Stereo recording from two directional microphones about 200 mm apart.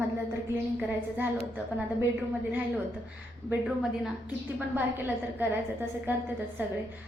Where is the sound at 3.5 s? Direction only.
5° right (ahead or behind).